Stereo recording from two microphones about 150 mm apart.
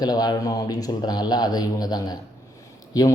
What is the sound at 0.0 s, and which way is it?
Speech, 25° left (ahead or behind).